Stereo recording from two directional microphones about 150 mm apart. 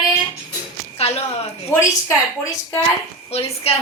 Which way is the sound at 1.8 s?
20° left (ahead or behind).